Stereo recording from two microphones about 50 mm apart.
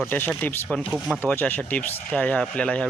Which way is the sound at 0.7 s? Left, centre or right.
Left.